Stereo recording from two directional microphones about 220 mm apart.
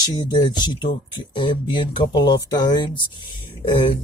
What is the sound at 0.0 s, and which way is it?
Speech, 20° left (ahead or behind).